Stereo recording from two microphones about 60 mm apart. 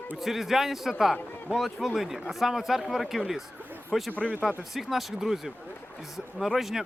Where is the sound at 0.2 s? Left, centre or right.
Centre.